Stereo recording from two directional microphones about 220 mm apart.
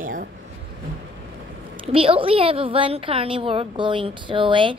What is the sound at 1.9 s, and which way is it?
A woman's voice, 25° right (ahead or behind).